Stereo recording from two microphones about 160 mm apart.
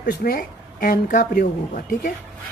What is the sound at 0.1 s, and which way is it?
Speech, 70° left (ahead or behind).